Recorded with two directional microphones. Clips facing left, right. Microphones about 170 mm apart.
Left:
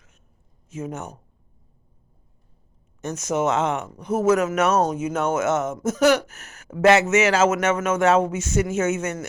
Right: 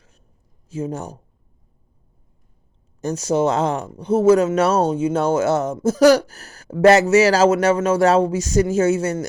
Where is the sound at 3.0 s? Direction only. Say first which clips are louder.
Right 5 dB; 35° right (ahead or behind).